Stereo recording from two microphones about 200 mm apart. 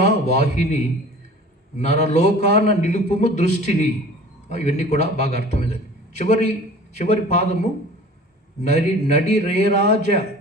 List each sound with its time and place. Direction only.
0.0 s a man's voice: 35° left (ahead or behind)
7.0 s a man's voice: 35° left (ahead or behind)